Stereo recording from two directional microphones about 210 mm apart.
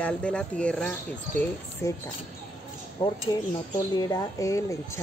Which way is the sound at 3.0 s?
20° left (ahead or behind).